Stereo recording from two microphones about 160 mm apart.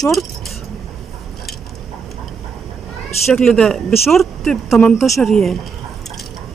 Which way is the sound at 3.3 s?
5° left (ahead or behind).